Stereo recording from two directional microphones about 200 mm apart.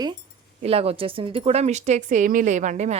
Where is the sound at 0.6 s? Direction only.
30° right (ahead or behind).